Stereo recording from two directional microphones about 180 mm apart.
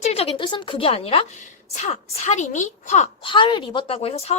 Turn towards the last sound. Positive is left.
turn(degrees=35)  # may be behind; listen again after turning